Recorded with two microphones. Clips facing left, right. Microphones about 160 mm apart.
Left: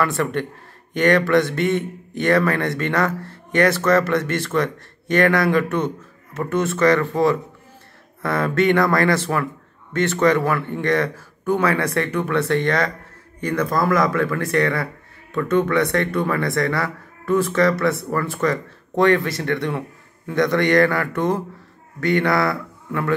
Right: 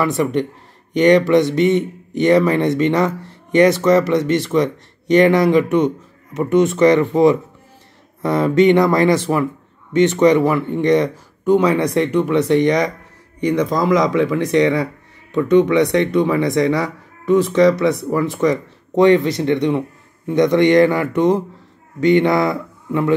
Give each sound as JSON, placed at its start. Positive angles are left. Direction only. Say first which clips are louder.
{"t": 0.0, "sound": "speech", "louder": "right 4 dB", "side_deg": -15}